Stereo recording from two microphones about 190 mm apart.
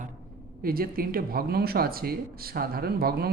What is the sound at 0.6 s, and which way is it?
Speech, 50° right (ahead or behind).